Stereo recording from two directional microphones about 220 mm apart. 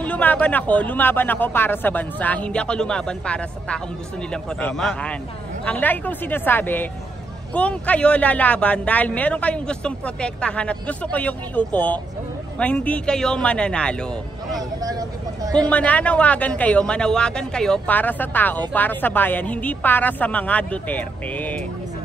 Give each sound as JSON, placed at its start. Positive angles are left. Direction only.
{"t": 0.0, "sound": "a man's voice", "side_deg": 5}
{"t": 14.6, "sound": "speech", "side_deg": -15}
{"t": 15.7, "sound": "speech", "side_deg": 5}